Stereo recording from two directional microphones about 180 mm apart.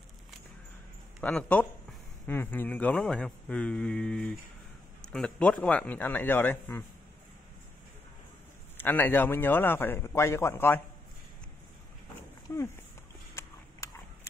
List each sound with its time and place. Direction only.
1.2 s a man's voice: 5° left (ahead or behind)
8.7 s a man's voice: 10° left (ahead or behind)
12.4 s speech: 15° left (ahead or behind)
13.4 s a sound: 15° left (ahead or behind)